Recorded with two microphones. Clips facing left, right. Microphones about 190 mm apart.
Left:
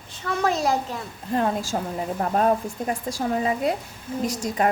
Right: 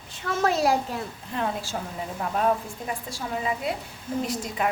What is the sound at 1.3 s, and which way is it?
A woman's voice, 40° left (ahead or behind).